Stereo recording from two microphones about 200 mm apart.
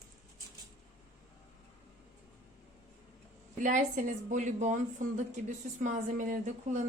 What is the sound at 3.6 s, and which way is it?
Speech, 40° right (ahead or behind).